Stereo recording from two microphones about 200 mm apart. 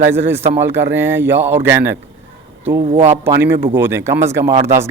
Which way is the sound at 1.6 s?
65° right (ahead or behind).